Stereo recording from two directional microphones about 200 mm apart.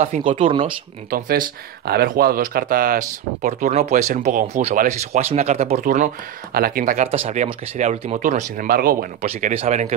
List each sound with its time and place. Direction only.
0.4 s speech: 25° right (ahead or behind)
1.1 s speech: 45° right (ahead or behind)
7.2 s speech: 30° right (ahead or behind)
9.2 s speech: 30° right (ahead or behind)